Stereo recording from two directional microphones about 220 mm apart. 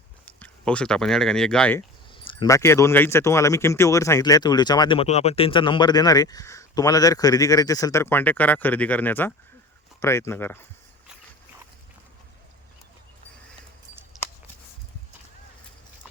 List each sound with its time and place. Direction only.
0.3 s speech: 5° left (ahead or behind)
2.1 s speech: 20° left (ahead or behind)